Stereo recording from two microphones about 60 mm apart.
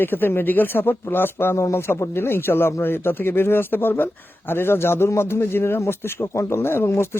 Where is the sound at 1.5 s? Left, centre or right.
Left.